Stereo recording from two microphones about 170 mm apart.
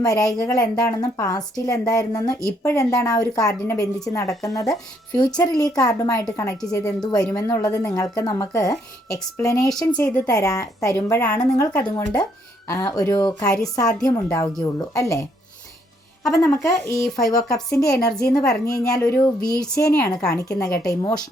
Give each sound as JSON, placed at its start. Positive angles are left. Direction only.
{"t": 0.0, "sound": "a woman's voice", "side_deg": 20}
{"t": 11.7, "sound": "speech", "side_deg": 10}
{"t": 12.6, "sound": "a woman's voice", "side_deg": 20}
{"t": 16.3, "sound": "a woman's voice", "side_deg": 15}
{"t": 17.0, "sound": "speech", "side_deg": 0}
{"t": 17.5, "sound": "a woman's voice", "side_deg": 20}